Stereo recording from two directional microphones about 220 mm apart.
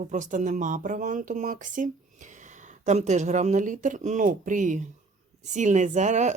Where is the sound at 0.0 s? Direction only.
35° right (ahead or behind).